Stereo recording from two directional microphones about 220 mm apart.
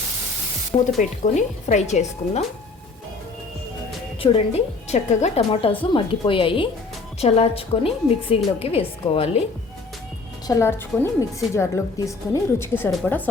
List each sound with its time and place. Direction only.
0.9 s speech: 35° left (ahead or behind)
4.2 s a woman's voice: 25° left (ahead or behind)
10.4 s a woman's voice: 15° left (ahead or behind)